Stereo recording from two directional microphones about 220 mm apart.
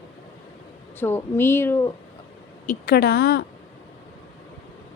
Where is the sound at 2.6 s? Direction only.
45° left (ahead or behind).